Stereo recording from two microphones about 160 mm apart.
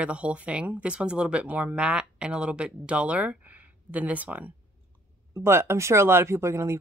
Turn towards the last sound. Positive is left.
turn(degrees=-15)  # may be behind; listen again after turning